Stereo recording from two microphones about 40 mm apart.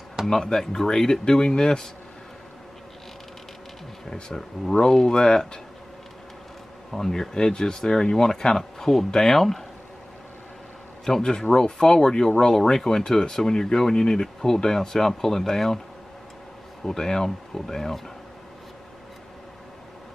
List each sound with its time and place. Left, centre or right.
0.3 s speech: centre
4.1 s speech: centre
7.1 s speech: centre
11.1 s speech: centre
16.8 s speech: centre